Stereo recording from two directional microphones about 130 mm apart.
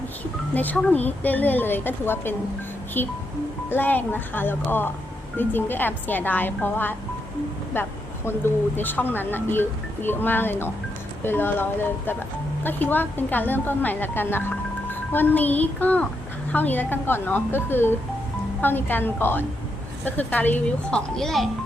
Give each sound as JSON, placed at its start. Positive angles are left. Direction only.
{"t": 0.5, "sound": "a woman's voice", "side_deg": 15}
{"t": 3.7, "sound": "a woman's voice", "side_deg": 15}